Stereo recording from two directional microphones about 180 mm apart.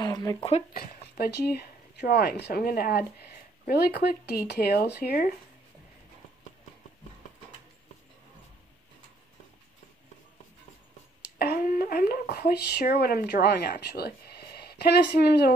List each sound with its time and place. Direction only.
0.0 s a sound: 20° left (ahead or behind)
0.4 s speech: 35° left (ahead or behind)
0.7 s speech: 55° left (ahead or behind)
11.3 s speech: 60° left (ahead or behind)